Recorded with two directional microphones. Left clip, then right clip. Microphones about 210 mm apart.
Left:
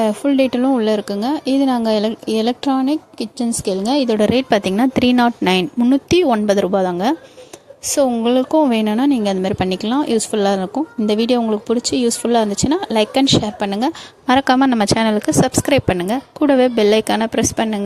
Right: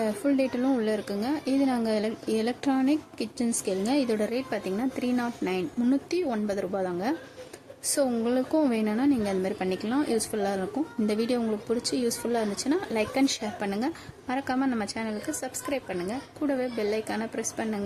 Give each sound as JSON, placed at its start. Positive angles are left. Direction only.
{"t": 0.0, "sound": "speech", "side_deg": 40}